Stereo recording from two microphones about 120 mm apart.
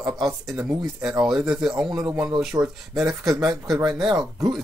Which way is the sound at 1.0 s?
5° right (ahead or behind).